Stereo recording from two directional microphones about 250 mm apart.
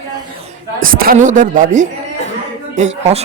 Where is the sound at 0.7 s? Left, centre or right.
Right.